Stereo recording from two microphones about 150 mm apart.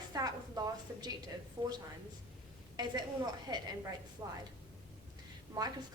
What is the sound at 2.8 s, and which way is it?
A woman's voice, 25° right (ahead or behind).